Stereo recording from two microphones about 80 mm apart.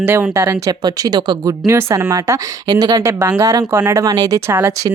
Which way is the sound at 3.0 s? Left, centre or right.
Right.